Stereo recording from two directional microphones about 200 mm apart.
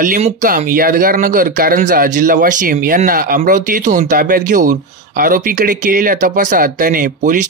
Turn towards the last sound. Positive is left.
turn(degrees=-40)  # may be behind; listen again after turning